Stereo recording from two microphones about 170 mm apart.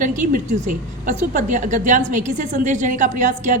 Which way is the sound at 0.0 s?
50° right (ahead or behind).